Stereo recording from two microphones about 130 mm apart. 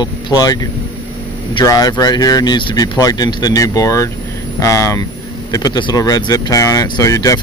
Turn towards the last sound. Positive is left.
turn(degrees=25)  # may be behind; listen again after turning